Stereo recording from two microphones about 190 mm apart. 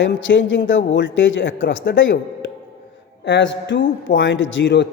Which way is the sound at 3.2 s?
70° left (ahead or behind).